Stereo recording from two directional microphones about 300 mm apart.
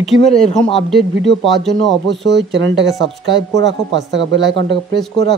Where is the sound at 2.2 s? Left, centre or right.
Right.